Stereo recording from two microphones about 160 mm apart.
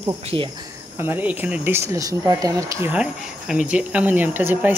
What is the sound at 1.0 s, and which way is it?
Speech, 10° right (ahead or behind).